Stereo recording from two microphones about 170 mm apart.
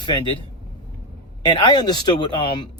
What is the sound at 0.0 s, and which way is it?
Speech, 25° left (ahead or behind).